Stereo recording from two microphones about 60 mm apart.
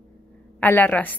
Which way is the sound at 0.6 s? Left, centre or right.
Left.